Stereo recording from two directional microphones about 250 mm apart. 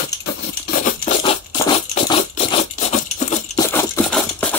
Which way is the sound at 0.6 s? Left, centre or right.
Left.